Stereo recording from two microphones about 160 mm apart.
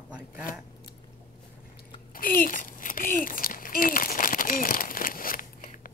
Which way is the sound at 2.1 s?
60° left (ahead or behind).